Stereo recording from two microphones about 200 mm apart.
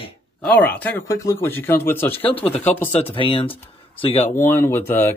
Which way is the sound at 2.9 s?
30° left (ahead or behind).